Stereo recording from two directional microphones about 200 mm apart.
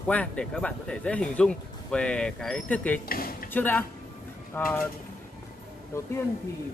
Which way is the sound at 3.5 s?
10° left (ahead or behind).